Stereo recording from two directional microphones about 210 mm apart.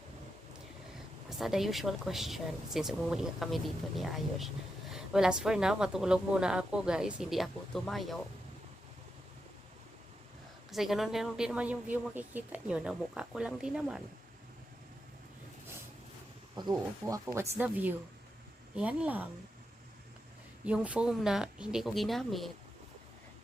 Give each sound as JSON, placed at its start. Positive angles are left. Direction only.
{"t": 1.3, "sound": "speech", "side_deg": 0}
{"t": 10.7, "sound": "speech", "side_deg": 0}
{"t": 16.6, "sound": "speech", "side_deg": -20}
{"t": 20.7, "sound": "speech", "side_deg": -5}